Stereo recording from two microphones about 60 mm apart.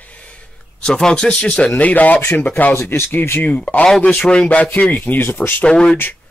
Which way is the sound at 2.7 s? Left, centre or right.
Left.